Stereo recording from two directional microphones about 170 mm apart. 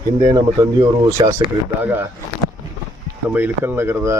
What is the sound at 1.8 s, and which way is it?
Speech, 10° right (ahead or behind).